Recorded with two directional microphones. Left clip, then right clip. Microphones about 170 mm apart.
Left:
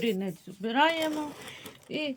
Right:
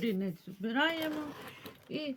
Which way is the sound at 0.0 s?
20° right (ahead or behind).